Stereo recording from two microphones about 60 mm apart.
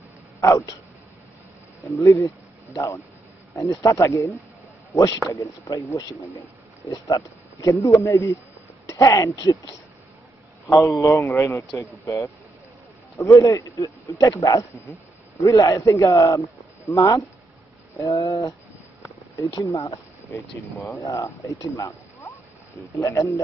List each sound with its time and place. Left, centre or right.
0.4 s speech: left
1.9 s speech: left
4.9 s a man's voice: left
5.3 s speech: left
7.6 s speech: left
11.0 s speech: left
13.2 s speech: left
15.4 s speech: left
15.8 s speech: left
21.0 s speech: left